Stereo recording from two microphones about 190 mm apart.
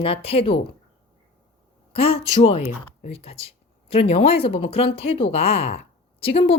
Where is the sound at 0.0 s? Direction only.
30° left (ahead or behind).